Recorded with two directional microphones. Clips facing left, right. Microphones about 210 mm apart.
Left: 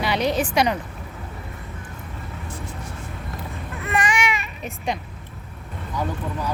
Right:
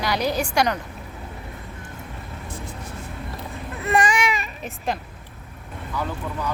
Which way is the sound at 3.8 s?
35° right (ahead or behind).